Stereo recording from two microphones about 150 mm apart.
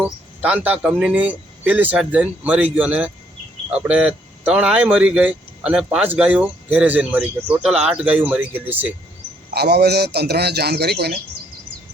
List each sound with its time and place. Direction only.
0.0 s speech: 10° right (ahead or behind)
9.5 s a man's voice: 90° right